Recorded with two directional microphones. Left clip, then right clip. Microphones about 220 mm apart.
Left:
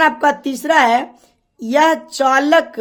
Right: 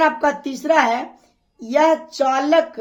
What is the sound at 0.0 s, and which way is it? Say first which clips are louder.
A woman's voice: left 3 dB; 30° left (ahead or behind).